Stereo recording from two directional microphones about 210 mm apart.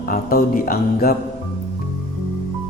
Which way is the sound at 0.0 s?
45° left (ahead or behind).